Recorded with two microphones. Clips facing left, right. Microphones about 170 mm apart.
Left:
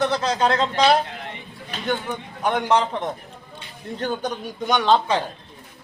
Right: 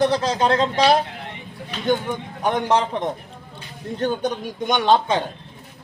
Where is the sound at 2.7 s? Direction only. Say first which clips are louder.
Left 1 dB; 10° right (ahead or behind).